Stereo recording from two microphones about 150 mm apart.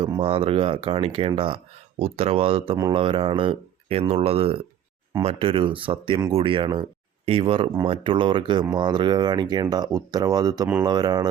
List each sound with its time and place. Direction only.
0.0 s speech: 35° right (ahead or behind)